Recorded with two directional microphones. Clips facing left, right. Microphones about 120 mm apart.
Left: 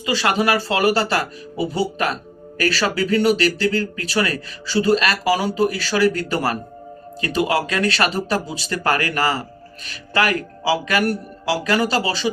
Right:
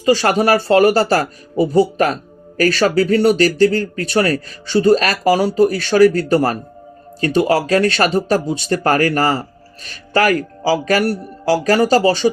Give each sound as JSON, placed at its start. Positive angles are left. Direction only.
{"t": 0.0, "sound": "a man's voice", "side_deg": -40}